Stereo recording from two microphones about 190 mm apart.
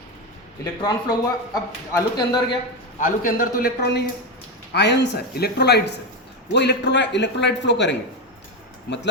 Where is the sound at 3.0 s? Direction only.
50° left (ahead or behind).